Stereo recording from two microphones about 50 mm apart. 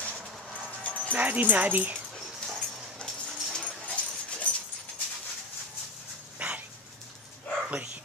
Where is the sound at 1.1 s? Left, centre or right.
Right.